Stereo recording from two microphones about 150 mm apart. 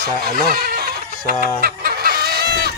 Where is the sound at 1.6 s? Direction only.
85° right.